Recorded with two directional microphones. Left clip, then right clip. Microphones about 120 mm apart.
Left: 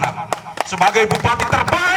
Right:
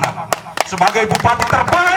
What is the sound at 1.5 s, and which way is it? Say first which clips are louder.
Speech: right 3 dB; 25° left (ahead or behind).